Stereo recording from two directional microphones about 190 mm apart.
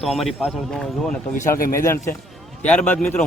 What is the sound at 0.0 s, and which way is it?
Speech, centre (ahead or behind).